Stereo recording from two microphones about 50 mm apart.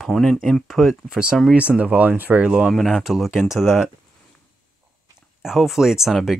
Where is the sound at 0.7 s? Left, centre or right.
Centre.